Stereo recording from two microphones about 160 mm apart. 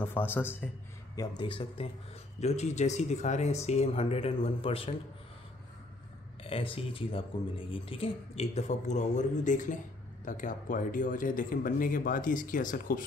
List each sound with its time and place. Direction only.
0.0 s speech: 10° left (ahead or behind)
1.1 s speech: 25° left (ahead or behind)
2.4 s speech: 45° left (ahead or behind)
6.4 s a man's voice: 35° left (ahead or behind); by 13.0 s 60° left (ahead or behind)